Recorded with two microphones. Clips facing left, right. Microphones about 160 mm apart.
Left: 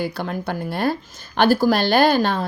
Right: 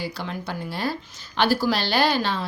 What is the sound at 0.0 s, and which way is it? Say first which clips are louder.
A woman's voice: left 6 dB; 55° left (ahead or behind).